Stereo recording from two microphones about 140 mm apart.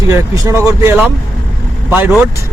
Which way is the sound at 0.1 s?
25° right (ahead or behind).